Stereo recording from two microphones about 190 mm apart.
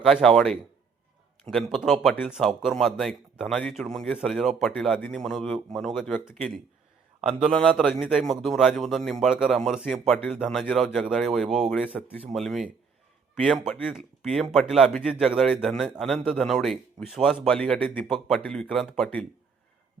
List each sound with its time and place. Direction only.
0.0 s speech: centre (ahead or behind)
7.3 s a man's voice: 30° right (ahead or behind)
7.5 s speech: 5° left (ahead or behind)